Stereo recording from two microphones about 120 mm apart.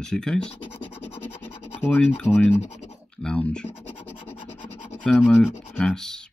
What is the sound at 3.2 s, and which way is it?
Scratch, 10° left (ahead or behind).